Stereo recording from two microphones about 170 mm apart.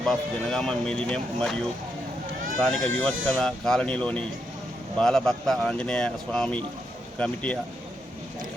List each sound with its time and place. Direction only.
0.0 s speech: centre (ahead or behind)